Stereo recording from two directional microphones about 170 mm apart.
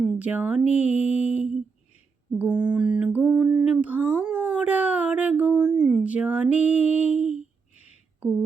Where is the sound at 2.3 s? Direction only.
10° right (ahead or behind).